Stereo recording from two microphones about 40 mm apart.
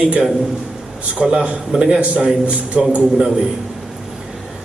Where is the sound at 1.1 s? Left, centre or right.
Right.